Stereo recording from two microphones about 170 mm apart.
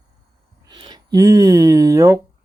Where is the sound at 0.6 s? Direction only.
25° right (ahead or behind).